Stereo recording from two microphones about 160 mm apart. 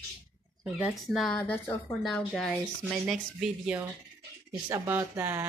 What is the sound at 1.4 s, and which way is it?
Speech, 10° left (ahead or behind).